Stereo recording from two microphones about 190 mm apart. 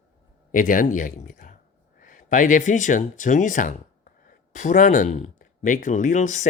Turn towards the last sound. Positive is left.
turn(degrees=40)  # may be behind; listen again after turning